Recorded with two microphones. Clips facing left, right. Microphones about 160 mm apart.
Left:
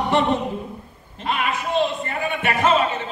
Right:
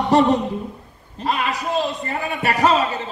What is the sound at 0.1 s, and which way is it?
A man's voice, 40° right (ahead or behind).